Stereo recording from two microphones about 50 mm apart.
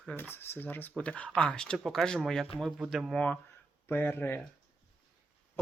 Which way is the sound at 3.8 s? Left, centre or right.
Left.